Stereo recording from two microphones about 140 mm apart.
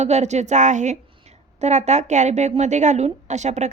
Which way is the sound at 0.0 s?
55° right (ahead or behind).